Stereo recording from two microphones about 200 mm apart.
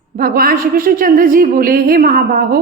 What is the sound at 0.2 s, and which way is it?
A woman's voice, 50° right (ahead or behind).